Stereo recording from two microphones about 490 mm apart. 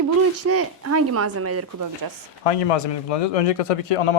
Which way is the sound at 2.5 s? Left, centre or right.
Left.